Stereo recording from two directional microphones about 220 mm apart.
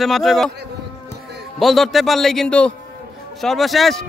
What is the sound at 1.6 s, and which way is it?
Speech, centre (ahead or behind).